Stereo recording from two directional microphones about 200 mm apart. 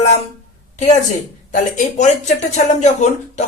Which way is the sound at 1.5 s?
40° left (ahead or behind).